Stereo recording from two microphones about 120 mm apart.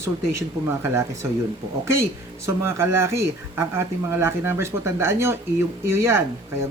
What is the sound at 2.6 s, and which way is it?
Speech, 20° right (ahead or behind).